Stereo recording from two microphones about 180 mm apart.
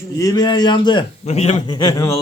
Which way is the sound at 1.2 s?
35° left (ahead or behind).